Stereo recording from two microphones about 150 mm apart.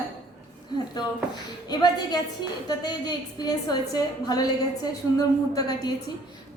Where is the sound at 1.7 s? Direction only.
30° left (ahead or behind).